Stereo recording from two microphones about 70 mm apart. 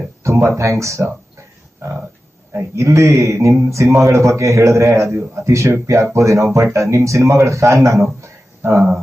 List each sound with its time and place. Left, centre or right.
0.2 s speech: right
2.5 s a man's voice: right
8.2 s a sound: right